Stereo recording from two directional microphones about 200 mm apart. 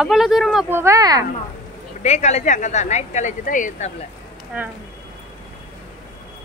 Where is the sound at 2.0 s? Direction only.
35° left (ahead or behind).